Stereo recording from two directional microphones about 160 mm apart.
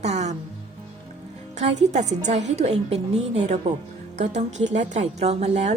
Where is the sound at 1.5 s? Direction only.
45° right (ahead or behind).